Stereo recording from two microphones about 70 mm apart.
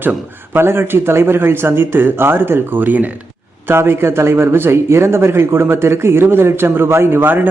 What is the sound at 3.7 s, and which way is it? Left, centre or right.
A man's voice, right.